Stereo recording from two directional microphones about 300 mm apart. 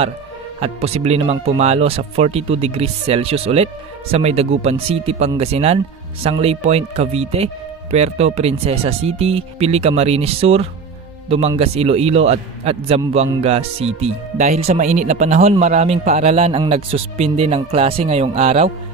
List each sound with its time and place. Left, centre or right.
0.6 s a man's voice: right